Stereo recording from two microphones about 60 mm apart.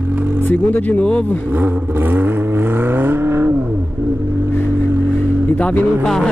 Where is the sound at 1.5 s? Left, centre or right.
Right.